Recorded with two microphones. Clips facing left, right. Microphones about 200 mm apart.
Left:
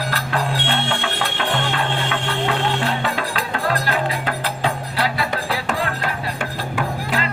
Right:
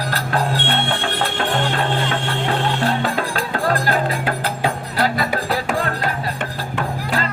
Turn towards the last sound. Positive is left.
turn(degrees=-40)  # may be behind; listen again after turning